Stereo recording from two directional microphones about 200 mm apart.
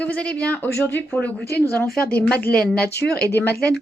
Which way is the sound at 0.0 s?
5° left (ahead or behind).